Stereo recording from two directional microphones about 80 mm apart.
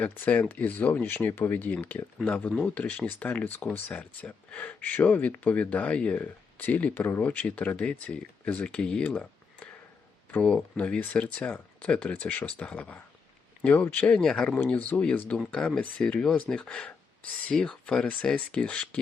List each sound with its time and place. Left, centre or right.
0.0 s speech: left